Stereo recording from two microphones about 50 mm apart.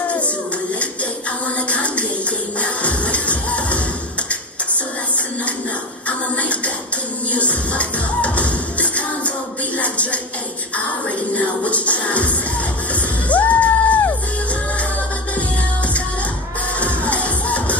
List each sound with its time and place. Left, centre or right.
1.7 s a sound: left
2.6 s music: left
6.0 s music: left
11.3 s music: left
16.8 s music: left